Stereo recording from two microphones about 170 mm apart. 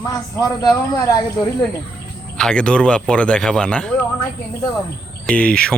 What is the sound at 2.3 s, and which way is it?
Speech, 5° left (ahead or behind).